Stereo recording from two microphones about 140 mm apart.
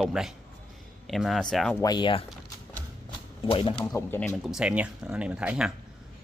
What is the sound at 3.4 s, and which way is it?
Speech, 40° left (ahead or behind).